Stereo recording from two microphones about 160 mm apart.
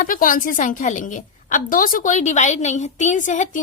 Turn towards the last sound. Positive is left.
turn(degrees=50)  # may be behind; listen again after turning